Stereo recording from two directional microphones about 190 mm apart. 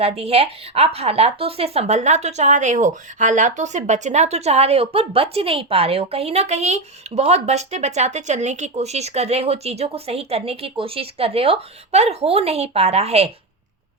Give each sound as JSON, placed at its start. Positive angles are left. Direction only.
{"t": 0.0, "sound": "speech", "side_deg": -30}